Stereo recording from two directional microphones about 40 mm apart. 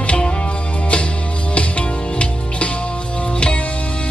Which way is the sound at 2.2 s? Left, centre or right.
Left.